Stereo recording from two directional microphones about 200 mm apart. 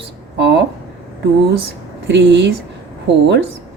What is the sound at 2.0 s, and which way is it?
Speech, 65° right (ahead or behind).